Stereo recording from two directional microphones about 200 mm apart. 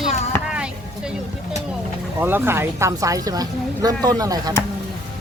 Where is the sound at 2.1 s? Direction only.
10° right (ahead or behind).